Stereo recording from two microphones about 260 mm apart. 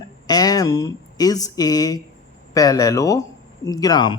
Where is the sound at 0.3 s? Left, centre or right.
Centre.